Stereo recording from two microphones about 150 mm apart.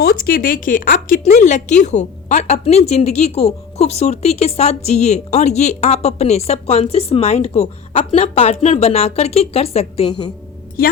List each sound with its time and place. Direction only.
0.0 s speech: 70° left (ahead or behind)
1.3 s a woman's voice: 55° left (ahead or behind)
10.1 s speech: 30° left (ahead or behind)
10.8 s a woman's voice: 85° left